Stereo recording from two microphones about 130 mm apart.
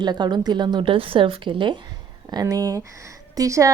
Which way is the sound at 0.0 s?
35° right (ahead or behind).